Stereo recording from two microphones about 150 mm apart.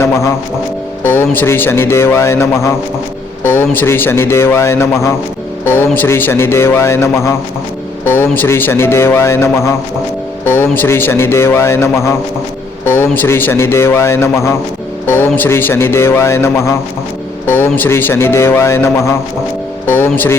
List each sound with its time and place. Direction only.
0.0 s a man's voice: 20° left (ahead or behind)